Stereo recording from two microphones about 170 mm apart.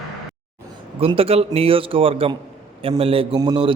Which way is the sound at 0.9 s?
35° right (ahead or behind).